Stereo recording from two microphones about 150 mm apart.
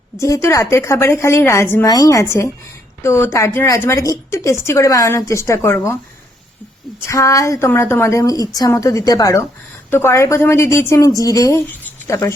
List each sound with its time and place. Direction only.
0.2 s a woman's voice: 20° left (ahead or behind)
7.0 s a woman's voice: 20° left (ahead or behind)